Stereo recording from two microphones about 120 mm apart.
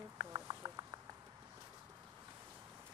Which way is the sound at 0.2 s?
40° right (ahead or behind).